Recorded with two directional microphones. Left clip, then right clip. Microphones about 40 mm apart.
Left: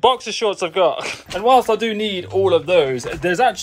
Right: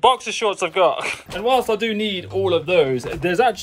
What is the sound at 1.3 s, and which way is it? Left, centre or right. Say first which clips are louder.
Speech: left 5 dB; centre.